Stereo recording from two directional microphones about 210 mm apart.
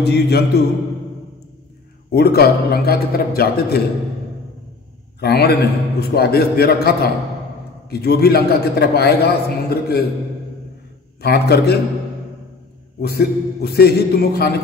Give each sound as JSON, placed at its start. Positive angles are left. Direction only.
{"t": 0.0, "sound": "a man's voice", "side_deg": 50}
{"t": 2.0, "sound": "a man's voice", "side_deg": 50}
{"t": 5.2, "sound": "a man's voice", "side_deg": 50}
{"t": 11.1, "sound": "a man's voice", "side_deg": 50}
{"t": 13.0, "sound": "a man's voice", "side_deg": 50}